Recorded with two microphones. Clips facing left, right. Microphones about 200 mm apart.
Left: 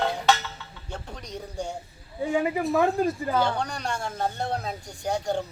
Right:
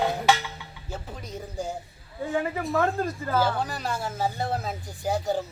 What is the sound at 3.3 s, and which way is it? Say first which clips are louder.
Speech: even; 5° right (ahead or behind).